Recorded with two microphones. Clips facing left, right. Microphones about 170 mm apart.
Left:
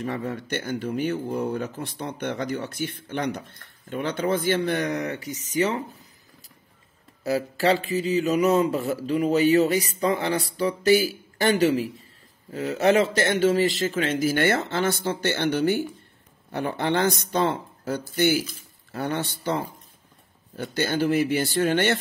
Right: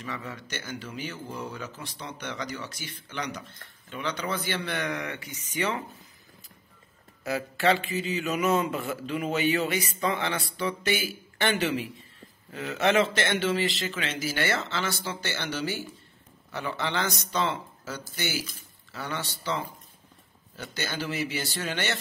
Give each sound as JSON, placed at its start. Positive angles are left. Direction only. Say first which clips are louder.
{"t": 0.0, "sound": "a man's voice", "louder": "left 8 dB", "side_deg": 55}
{"t": 7.2, "sound": "a man's voice", "louder": "left 3 dB", "side_deg": 35}